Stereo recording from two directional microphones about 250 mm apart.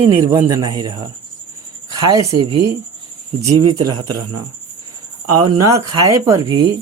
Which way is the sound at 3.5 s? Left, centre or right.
Right.